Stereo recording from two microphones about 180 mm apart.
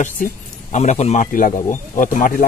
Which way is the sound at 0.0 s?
40° left (ahead or behind).